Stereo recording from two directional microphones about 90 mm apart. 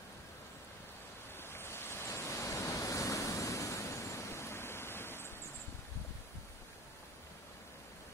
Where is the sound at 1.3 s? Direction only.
25° left (ahead or behind).